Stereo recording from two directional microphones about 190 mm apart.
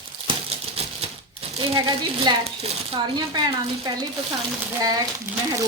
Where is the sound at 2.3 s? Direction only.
20° right (ahead or behind).